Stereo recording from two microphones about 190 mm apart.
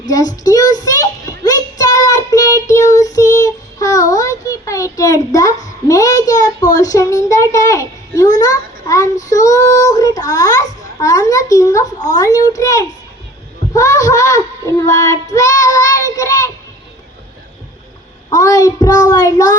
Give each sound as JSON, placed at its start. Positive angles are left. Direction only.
{"t": 0.0, "sound": "a sound", "side_deg": 20}
{"t": 13.7, "sound": "child singing", "side_deg": 15}
{"t": 18.3, "sound": "child singing", "side_deg": 20}